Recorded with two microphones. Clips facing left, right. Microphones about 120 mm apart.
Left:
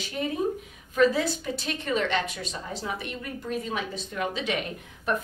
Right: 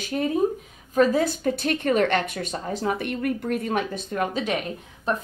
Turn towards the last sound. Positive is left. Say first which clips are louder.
# right 2 dB
turn(degrees=-30)  # may be behind; listen again after turning